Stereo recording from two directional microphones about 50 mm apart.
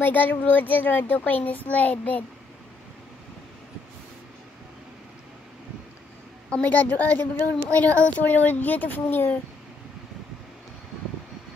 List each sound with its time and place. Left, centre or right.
0.0 s a child's voice: left
6.6 s a child's voice: left